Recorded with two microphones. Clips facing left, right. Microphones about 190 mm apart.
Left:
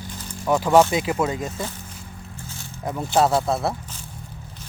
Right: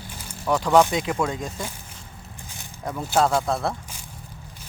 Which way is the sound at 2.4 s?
15° right (ahead or behind).